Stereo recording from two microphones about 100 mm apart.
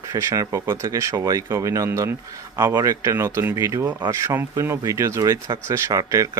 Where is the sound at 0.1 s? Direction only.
30° right (ahead or behind).